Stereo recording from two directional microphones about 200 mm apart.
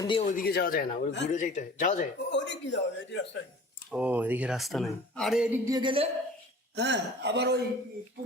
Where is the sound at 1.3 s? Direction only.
35° left (ahead or behind).